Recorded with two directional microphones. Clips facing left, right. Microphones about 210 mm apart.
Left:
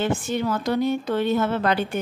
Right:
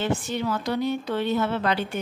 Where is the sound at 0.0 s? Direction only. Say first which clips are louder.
Left 2 dB; 50° left (ahead or behind).